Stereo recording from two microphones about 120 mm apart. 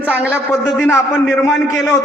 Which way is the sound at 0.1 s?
10° right (ahead or behind).